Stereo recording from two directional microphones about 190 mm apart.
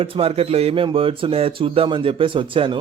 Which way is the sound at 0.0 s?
30° right (ahead or behind).